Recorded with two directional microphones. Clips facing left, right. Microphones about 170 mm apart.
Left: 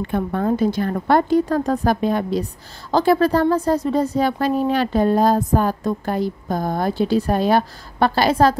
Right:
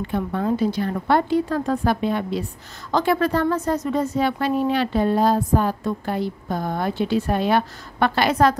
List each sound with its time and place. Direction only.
0.0 s a woman's voice: 50° left (ahead or behind); by 8.5 s 30° left (ahead or behind)